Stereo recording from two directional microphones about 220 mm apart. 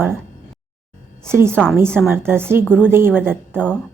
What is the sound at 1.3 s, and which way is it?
Speech, 10° right (ahead or behind).